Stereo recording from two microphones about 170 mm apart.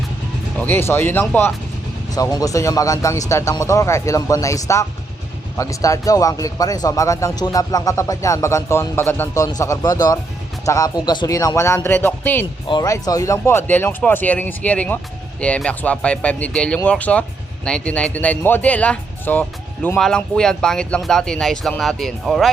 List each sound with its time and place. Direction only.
0.6 s speech: 15° left (ahead or behind)
12.6 s speech: 25° left (ahead or behind); by 22.4 s centre (ahead or behind)